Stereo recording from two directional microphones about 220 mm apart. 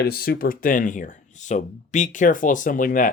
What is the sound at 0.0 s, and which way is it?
Speech, 45° left (ahead or behind).